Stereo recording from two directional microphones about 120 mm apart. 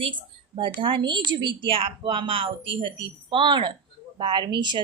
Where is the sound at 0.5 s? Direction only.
45° right (ahead or behind).